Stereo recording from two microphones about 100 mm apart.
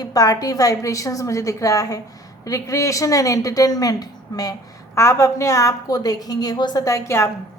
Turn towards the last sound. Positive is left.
turn(degrees=25)  # may be behind; listen again after turning